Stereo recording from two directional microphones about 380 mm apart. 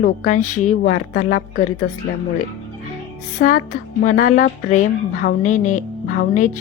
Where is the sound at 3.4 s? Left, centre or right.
Left.